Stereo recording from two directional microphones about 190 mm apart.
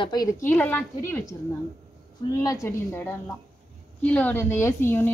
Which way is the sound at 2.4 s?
15° left (ahead or behind).